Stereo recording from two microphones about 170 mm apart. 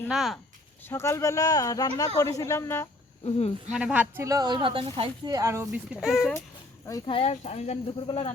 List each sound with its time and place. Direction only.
0.1 s speech: centre (ahead or behind)
0.9 s speech: 15° left (ahead or behind)
3.2 s speech: 35° left (ahead or behind)
3.7 s speech: 5° right (ahead or behind)
4.3 s speech: 25° right (ahead or behind); by 6.3 s centre (ahead or behind)
7.1 s speech: 35° left (ahead or behind)